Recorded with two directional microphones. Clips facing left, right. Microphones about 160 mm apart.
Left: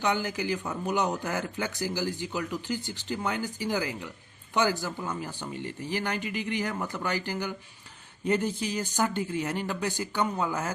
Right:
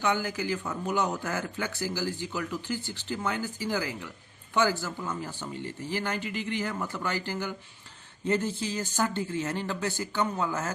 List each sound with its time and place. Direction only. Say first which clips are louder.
0.0 s speech: even; 20° left (ahead or behind)